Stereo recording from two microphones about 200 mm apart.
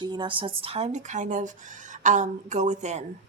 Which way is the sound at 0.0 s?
20° right (ahead or behind).